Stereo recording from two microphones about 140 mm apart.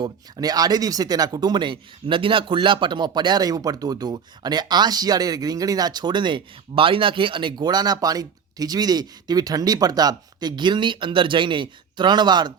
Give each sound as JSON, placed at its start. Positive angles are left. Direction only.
{"t": 0.0, "sound": "speech", "side_deg": -30}